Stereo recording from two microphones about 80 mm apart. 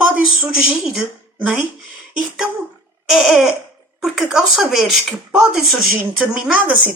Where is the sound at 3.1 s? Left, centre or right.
Centre.